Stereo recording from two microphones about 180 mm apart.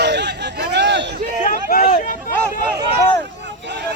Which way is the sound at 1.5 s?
50° left (ahead or behind).